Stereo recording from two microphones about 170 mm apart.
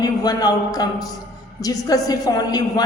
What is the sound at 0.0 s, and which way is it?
A man's voice, 20° left (ahead or behind).